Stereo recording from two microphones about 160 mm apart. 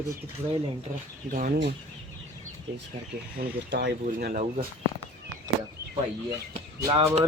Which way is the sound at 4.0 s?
65° right (ahead or behind).